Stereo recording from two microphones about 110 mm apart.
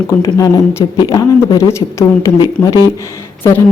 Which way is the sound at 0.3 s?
30° left (ahead or behind).